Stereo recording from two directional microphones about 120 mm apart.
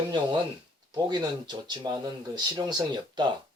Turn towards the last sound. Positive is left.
turn(degrees=-35)  # may be behind; listen again after turning